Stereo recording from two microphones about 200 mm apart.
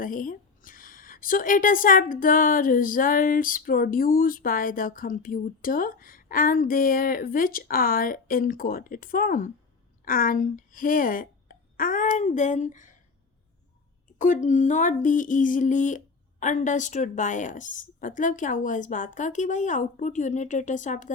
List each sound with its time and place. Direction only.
0.0 s speech: 40° left (ahead or behind)
14.2 s a woman's voice: 40° left (ahead or behind)